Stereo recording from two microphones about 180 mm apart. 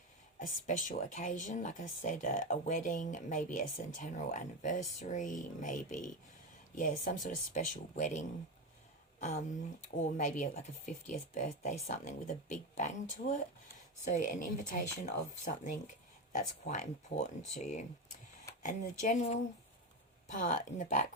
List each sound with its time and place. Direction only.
0.3 s speech: 45° left (ahead or behind)
10.0 s speech: 45° left (ahead or behind)